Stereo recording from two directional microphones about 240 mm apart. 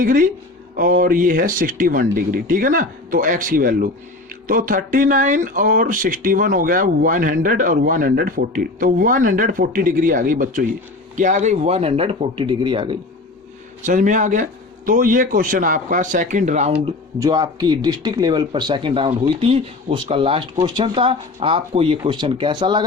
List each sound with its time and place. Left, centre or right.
0.0 s speech: right
13.8 s speech: right
16.8 s speech: centre